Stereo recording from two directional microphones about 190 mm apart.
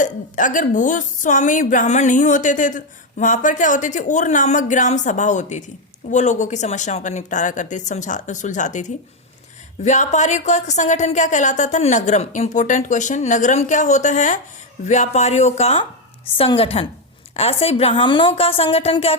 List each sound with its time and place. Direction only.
0.0 s a woman's voice: 45° left (ahead or behind)